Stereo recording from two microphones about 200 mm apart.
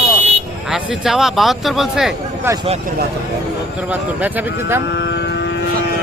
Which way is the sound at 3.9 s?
10° right (ahead or behind).